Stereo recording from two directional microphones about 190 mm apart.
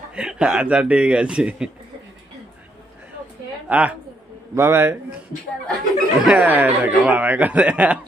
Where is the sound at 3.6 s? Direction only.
10° right (ahead or behind).